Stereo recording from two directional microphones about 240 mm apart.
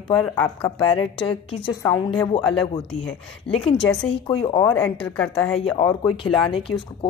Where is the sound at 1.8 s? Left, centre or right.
Centre.